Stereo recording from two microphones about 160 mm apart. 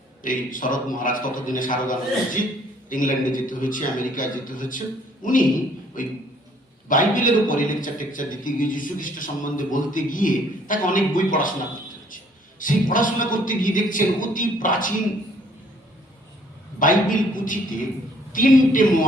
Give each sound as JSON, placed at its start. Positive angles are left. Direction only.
{"t": 0.2, "sound": "a man's voice", "side_deg": 55}
{"t": 16.8, "sound": "a man's voice", "side_deg": 55}